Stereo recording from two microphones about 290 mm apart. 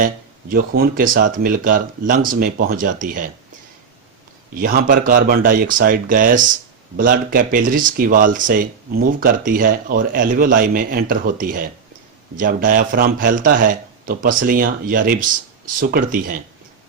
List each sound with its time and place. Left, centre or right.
0.5 s speech: right
4.6 s speech: right